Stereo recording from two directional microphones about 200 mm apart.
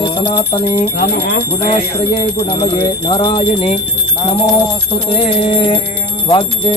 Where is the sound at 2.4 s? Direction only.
25° left (ahead or behind).